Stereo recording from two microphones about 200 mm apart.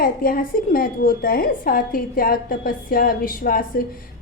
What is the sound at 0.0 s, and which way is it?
A woman's voice, 45° left (ahead or behind).